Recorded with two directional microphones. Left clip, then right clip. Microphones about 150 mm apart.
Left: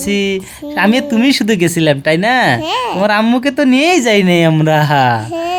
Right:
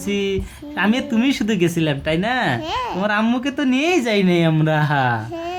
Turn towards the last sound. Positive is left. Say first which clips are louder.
# left 8 dB
turn(degrees=35)  # may be behind; listen again after turning